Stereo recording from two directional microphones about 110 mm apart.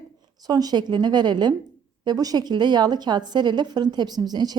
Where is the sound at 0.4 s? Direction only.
35° right (ahead or behind).